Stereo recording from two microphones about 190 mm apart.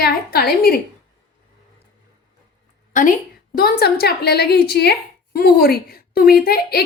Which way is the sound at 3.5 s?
55° left (ahead or behind).